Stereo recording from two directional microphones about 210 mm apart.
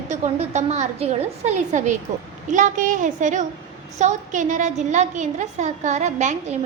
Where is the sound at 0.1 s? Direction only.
30° right (ahead or behind).